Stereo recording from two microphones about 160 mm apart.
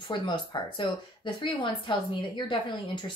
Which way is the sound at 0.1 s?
30° left (ahead or behind).